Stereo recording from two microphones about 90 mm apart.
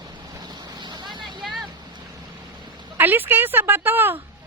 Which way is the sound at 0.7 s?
55° right (ahead or behind).